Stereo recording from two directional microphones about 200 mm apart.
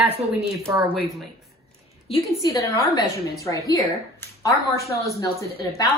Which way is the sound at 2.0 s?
20° left (ahead or behind).